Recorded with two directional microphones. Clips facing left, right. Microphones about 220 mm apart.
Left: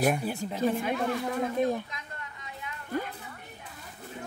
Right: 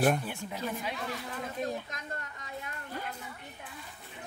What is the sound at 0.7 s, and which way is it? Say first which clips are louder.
Speech: left 8 dB; 50° left (ahead or behind).